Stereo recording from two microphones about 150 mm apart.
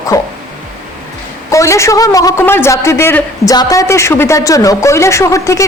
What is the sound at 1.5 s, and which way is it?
Speech, 20° left (ahead or behind).